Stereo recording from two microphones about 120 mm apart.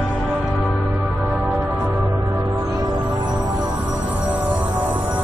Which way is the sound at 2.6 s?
35° right (ahead or behind).